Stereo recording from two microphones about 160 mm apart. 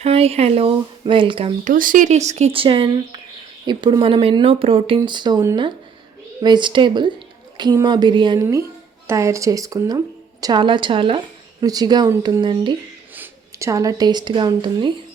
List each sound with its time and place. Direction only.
0.0 s speech: 40° right (ahead or behind)
1.6 s speech: 55° right (ahead or behind); by 12.7 s 30° right (ahead or behind)
13.1 s speech: 20° right (ahead or behind)